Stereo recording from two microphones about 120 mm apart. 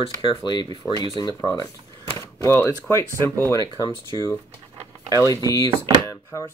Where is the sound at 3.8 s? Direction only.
30° left (ahead or behind).